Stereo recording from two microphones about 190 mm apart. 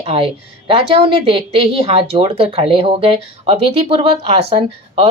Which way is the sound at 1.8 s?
30° right (ahead or behind).